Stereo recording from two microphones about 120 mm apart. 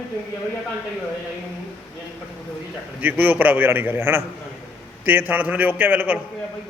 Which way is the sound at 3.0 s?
15° right (ahead or behind).